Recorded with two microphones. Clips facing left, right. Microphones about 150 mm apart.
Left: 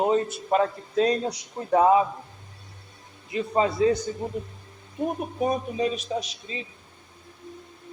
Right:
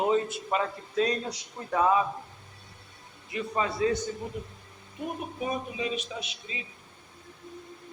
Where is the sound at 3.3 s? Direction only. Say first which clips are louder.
Left 6 dB; 25° left (ahead or behind).